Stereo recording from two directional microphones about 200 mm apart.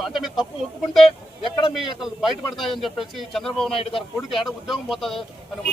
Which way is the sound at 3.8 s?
25° left (ahead or behind).